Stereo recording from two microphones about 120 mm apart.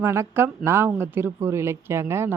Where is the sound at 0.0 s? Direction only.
20° right (ahead or behind).